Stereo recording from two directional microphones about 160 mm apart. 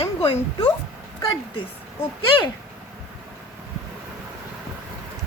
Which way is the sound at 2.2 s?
35° left (ahead or behind).